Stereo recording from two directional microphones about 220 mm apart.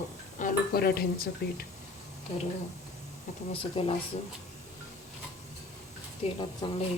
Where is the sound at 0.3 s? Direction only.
40° left (ahead or behind).